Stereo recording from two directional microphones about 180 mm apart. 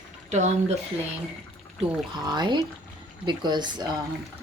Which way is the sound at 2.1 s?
25° right (ahead or behind).